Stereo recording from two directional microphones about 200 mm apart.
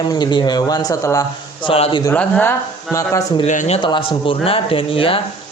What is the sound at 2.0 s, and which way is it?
Speech, 10° left (ahead or behind).